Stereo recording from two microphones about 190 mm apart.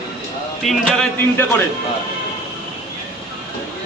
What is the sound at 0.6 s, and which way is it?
Speech, centre (ahead or behind).